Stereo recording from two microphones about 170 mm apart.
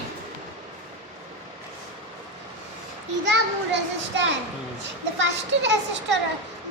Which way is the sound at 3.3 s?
90° right.